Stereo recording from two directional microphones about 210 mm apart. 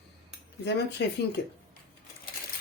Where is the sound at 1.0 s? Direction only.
55° left (ahead or behind).